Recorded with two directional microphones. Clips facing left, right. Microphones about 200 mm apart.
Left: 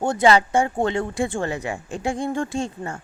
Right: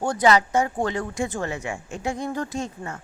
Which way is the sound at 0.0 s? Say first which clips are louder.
Left 2 dB; 25° left (ahead or behind).